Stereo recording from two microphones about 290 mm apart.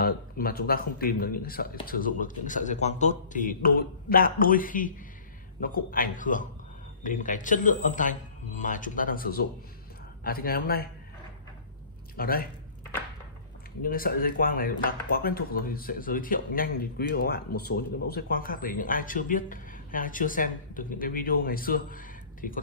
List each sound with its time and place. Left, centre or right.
0.0 s speech: left
12.2 s speech: left
13.8 s speech: left